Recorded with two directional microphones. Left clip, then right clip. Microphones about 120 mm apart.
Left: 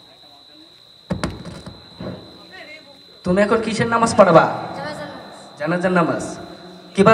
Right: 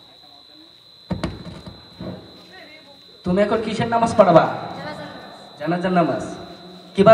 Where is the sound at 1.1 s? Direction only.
15° left (ahead or behind).